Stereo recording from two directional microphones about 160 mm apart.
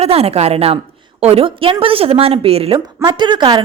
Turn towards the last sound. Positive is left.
turn(degrees=-30)  # may be behind; listen again after turning